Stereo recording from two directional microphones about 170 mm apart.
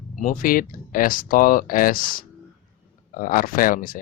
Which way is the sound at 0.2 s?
50° left (ahead or behind).